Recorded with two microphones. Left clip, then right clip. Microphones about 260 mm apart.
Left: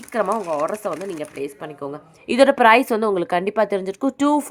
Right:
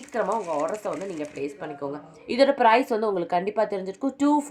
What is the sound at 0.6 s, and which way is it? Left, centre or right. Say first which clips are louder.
Speech: left 4 dB; left.